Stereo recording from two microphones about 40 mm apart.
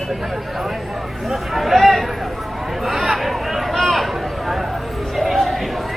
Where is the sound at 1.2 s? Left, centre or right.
Centre.